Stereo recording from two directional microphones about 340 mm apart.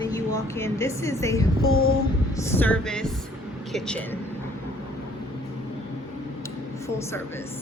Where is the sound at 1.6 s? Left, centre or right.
Left.